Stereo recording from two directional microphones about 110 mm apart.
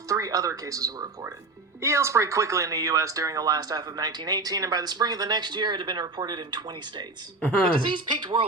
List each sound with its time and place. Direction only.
0.1 s speech: 35° right (ahead or behind)
1.8 s speech: 25° right (ahead or behind); by 8.4 s 45° right (ahead or behind)